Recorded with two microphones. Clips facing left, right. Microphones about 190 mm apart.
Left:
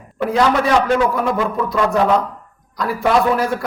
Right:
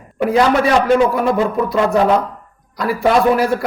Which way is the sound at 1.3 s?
25° right (ahead or behind).